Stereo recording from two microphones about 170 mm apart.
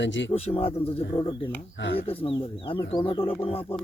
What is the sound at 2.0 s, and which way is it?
Speech, 35° left (ahead or behind).